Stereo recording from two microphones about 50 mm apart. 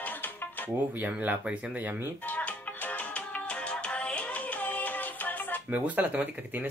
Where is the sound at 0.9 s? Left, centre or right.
Right.